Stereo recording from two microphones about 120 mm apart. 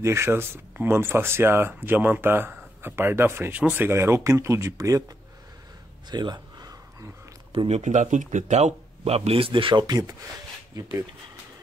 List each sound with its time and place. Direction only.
0.0 s speech: 20° right (ahead or behind)
6.0 s a sound: 35° right (ahead or behind)
7.5 s speech: 60° right (ahead or behind); by 11.1 s 25° right (ahead or behind)